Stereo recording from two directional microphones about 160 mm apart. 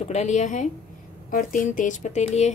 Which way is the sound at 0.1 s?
45° left (ahead or behind).